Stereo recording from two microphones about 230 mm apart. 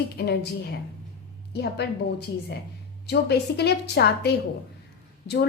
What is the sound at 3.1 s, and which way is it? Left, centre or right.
A woman's voice, left.